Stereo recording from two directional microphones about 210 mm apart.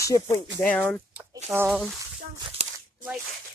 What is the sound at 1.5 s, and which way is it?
Speech, 10° right (ahead or behind).